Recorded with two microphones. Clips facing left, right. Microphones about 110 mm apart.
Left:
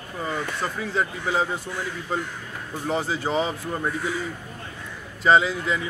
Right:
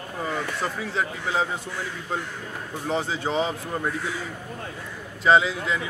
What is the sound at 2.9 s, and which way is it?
Speech, 5° left (ahead or behind).